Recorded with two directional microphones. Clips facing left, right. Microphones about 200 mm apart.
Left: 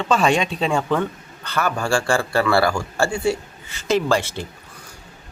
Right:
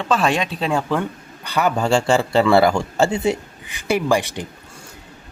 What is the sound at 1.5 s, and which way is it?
A man's voice, 15° right (ahead or behind).